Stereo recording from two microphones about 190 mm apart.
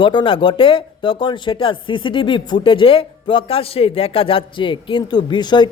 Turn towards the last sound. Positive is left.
turn(degrees=25)  # may be behind; listen again after turning